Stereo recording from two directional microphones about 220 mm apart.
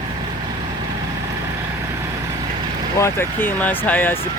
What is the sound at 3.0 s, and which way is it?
Speech, 10° left (ahead or behind).